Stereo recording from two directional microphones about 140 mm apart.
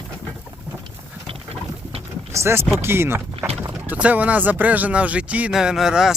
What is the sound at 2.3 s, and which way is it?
Speech, 20° right (ahead or behind).